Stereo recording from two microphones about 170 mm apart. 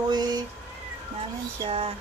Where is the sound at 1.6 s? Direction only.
35° right (ahead or behind).